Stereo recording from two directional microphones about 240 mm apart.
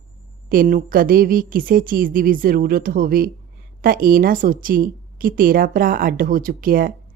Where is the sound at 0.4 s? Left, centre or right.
Right.